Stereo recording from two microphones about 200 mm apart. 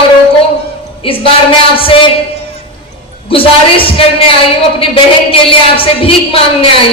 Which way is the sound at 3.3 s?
25° left (ahead or behind).